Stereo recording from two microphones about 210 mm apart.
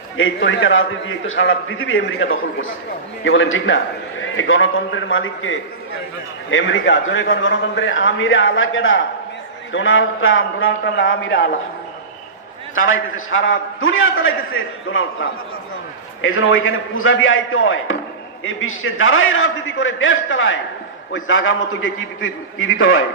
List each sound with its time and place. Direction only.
0.2 s a man's voice: 70° left (ahead or behind)
12.7 s a man's voice: 75° left (ahead or behind)